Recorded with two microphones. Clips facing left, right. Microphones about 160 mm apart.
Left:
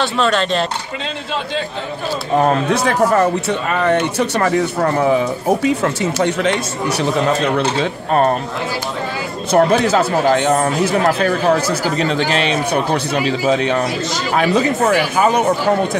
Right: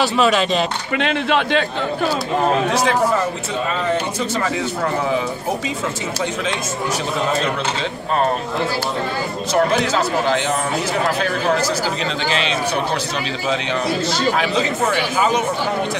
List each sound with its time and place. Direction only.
0.0 s speech: 5° right (ahead or behind)
0.9 s speech: 70° right (ahead or behind)
2.7 s speech: 60° left (ahead or behind)
9.5 s speech: 55° left (ahead or behind)
12.0 s speech: 55° left (ahead or behind)